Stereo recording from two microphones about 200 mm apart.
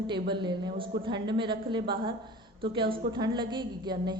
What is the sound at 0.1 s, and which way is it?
A woman's voice, 25° right (ahead or behind).